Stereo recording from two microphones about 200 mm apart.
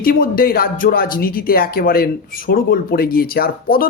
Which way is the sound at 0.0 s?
45° left (ahead or behind).